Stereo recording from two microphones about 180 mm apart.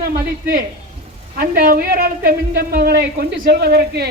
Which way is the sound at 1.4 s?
55° right (ahead or behind).